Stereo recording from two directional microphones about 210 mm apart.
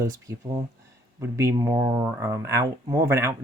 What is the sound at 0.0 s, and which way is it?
Speech, 15° right (ahead or behind).